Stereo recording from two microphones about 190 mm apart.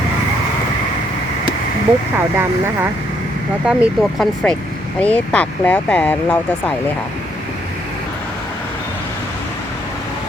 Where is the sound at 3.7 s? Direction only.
Centre (ahead or behind).